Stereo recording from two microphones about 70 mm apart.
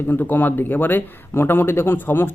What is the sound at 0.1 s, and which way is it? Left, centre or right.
Speech, left.